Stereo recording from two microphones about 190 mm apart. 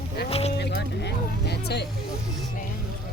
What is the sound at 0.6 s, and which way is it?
Music, 60° left (ahead or behind).